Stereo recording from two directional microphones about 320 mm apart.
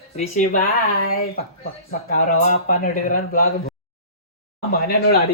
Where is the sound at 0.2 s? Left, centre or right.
Left.